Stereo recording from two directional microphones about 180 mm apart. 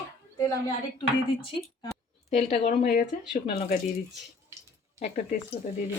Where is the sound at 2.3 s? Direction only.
40° left (ahead or behind).